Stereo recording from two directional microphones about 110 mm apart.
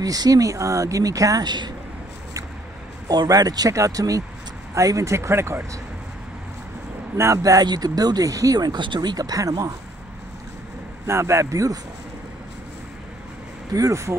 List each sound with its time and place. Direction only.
0.0 s speech: 35° right (ahead or behind)
3.1 s speech: 35° right (ahead or behind)
7.2 s speech: 30° right (ahead or behind)
11.1 s speech: 25° right (ahead or behind)
13.7 s speech: 30° right (ahead or behind)